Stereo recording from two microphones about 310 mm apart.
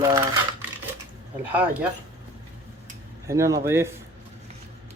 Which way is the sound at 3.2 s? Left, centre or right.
Centre.